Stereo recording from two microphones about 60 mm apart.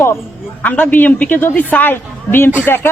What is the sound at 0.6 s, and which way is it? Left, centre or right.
Speech, left.